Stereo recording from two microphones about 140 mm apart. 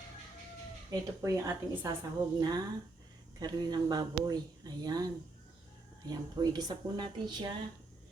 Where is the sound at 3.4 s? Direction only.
30° right (ahead or behind).